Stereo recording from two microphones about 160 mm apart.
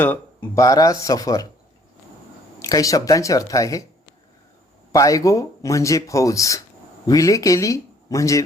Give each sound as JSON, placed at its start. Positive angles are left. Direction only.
{"t": 0.0, "sound": "speech", "side_deg": 10}
{"t": 0.6, "sound": "speech", "side_deg": 20}
{"t": 2.6, "sound": "speech", "side_deg": 20}
{"t": 4.9, "sound": "speech", "side_deg": 20}